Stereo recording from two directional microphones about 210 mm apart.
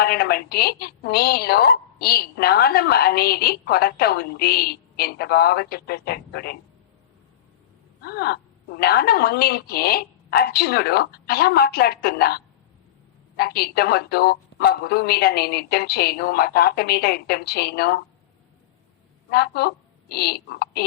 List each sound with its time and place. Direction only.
0.0 s a woman's voice: 50° left (ahead or behind)
8.0 s a woman's voice: 50° left (ahead or behind)
19.3 s a woman's voice: 50° left (ahead or behind)